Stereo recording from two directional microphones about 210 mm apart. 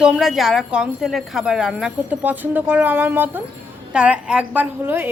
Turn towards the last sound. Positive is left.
turn(degrees=-10)  # may be behind; listen again after turning